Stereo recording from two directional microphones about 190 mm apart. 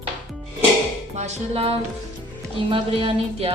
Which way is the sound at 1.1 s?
35° right (ahead or behind).